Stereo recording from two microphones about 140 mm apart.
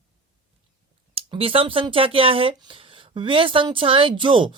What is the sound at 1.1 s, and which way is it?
Speech, 45° right (ahead or behind).